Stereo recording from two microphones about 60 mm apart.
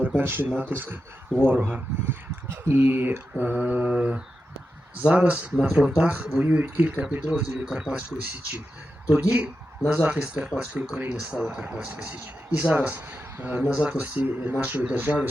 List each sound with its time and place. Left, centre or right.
0.0 s speech: right
5.5 s speech: centre
5.9 s speech: right
7.9 s speech: right
11.0 s speech: right
11.3 s speech: centre
13.7 s speech: centre
14.0 s speech: right